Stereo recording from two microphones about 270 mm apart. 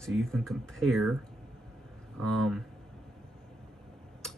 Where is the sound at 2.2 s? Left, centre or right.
Centre.